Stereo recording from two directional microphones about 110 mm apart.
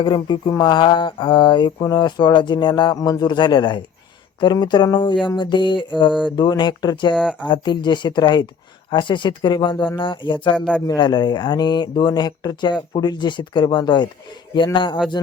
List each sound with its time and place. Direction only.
0.0 s speech: 45° left (ahead or behind)
7.2 s speech: 5° right (ahead or behind)
7.4 s speech: 45° left (ahead or behind)